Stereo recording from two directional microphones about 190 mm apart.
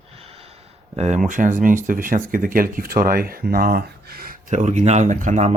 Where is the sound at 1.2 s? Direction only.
45° right (ahead or behind).